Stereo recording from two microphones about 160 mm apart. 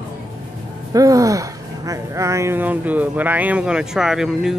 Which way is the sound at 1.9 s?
20° right (ahead or behind).